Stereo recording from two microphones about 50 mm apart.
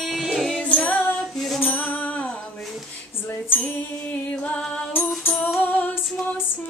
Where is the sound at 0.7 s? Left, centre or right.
Left.